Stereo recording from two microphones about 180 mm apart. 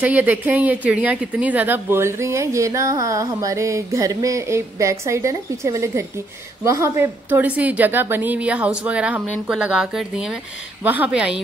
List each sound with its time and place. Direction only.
0.0 s a woman's voice: 10° right (ahead or behind)